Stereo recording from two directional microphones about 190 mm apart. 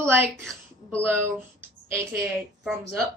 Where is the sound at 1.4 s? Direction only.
15° right (ahead or behind).